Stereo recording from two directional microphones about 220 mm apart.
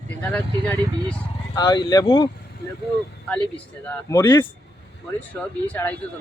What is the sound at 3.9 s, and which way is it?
Speech, 15° left (ahead or behind).